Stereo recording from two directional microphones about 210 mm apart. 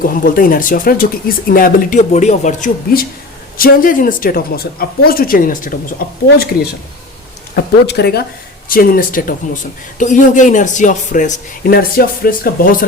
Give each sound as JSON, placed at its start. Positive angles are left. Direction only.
{"t": 0.0, "sound": "speech", "side_deg": 40}